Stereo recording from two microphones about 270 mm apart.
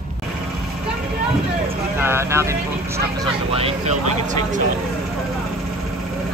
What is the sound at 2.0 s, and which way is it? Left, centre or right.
Speech, centre.